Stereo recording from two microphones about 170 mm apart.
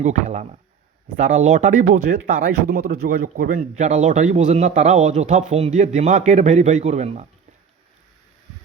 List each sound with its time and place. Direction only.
0.0 s speech: 45° right (ahead or behind)